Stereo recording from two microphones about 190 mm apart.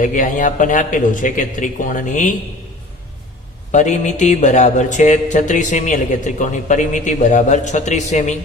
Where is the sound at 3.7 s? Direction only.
40° left (ahead or behind).